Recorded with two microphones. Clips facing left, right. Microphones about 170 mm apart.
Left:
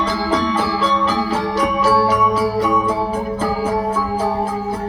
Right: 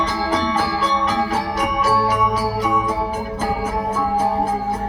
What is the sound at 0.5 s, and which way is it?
Organ, 30° left (ahead or behind).